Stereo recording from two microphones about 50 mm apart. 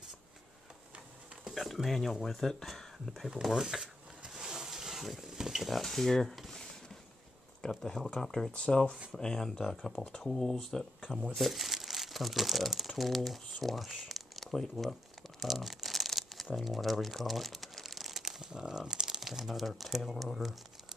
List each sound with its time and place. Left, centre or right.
1.5 s speech: centre
3.4 s a sound: centre
7.7 s speech: centre
8.5 s speech: left
9.1 s speech: centre
15.4 s crumpling: centre
16.5 s speech: centre